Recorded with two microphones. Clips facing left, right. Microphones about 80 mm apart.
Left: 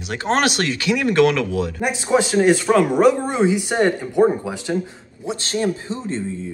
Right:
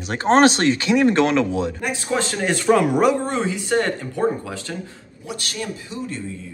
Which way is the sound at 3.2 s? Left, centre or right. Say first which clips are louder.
Left 4 dB; centre.